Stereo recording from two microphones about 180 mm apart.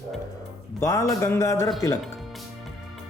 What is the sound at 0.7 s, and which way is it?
Speech, 20° left (ahead or behind).